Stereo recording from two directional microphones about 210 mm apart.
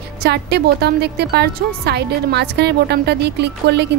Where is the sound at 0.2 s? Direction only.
50° right (ahead or behind).